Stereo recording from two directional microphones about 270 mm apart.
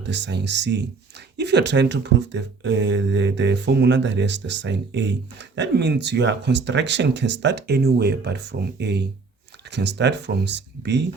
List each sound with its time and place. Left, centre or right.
0.0 s speech: right